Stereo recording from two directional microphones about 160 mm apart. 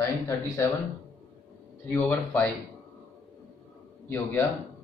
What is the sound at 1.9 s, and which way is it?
Speech, 15° left (ahead or behind).